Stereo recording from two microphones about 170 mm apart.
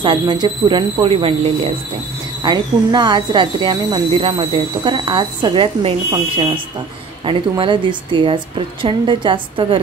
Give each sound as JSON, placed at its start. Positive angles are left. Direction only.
{"t": 0.0, "sound": "speech", "side_deg": -25}